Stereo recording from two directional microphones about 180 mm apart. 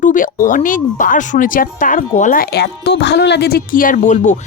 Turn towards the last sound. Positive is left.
turn(degrees=40)  # may be behind; listen again after turning